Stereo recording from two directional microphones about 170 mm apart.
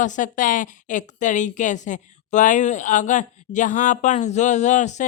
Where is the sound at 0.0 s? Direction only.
50° left (ahead or behind).